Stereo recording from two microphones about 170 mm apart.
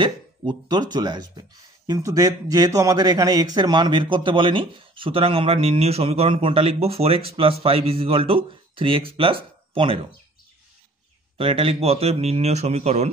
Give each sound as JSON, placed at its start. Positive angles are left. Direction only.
{"t": 0.0, "sound": "speech", "side_deg": -25}
{"t": 11.3, "sound": "speech", "side_deg": -35}